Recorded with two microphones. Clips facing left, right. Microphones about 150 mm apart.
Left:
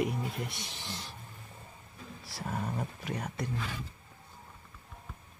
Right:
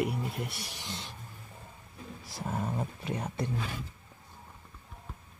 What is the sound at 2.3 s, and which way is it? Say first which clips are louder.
Speech: right 2 dB; 20° right (ahead or behind).